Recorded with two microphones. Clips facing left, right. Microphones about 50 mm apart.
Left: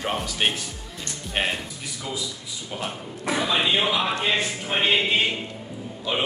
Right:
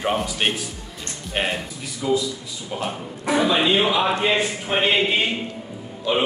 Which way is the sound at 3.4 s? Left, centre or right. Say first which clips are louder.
Right 4 dB; centre.